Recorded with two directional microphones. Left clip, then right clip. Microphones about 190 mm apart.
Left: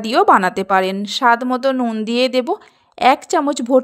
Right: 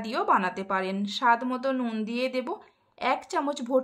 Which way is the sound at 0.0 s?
40° left (ahead or behind).